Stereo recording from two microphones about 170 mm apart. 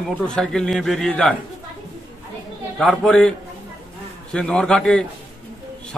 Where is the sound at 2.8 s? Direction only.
5° left (ahead or behind).